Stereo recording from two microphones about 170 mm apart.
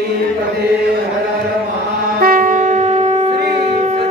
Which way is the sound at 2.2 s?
55° right (ahead or behind).